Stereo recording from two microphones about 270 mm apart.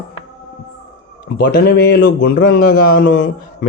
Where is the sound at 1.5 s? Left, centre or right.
Left.